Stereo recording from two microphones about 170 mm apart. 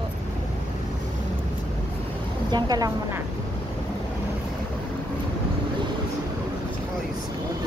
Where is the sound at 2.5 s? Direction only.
25° right (ahead or behind).